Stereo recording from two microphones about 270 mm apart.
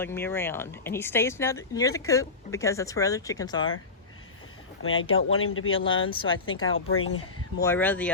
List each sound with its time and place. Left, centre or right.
0.0 s speech: centre
4.8 s speech: left
6.1 s speech: centre
6.7 s speech: left
7.6 s speech: centre